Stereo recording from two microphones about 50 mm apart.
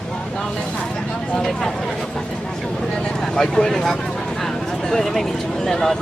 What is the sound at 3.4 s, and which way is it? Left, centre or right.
Speech, centre.